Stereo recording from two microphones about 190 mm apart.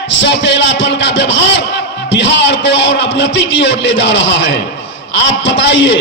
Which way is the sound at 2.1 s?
75° left (ahead or behind).